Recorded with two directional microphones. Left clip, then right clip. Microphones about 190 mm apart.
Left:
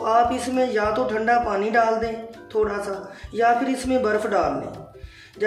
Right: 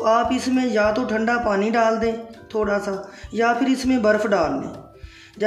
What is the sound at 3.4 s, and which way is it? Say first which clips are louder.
Speech: even; 45° right (ahead or behind).